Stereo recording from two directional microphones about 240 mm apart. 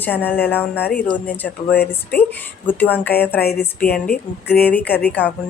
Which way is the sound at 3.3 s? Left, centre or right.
Left.